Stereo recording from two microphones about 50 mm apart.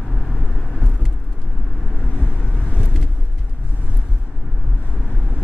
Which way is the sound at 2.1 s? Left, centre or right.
Left.